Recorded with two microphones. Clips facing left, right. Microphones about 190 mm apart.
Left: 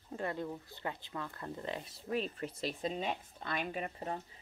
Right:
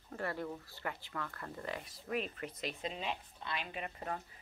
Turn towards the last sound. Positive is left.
turn(degrees=35)  # may be behind; listen again after turning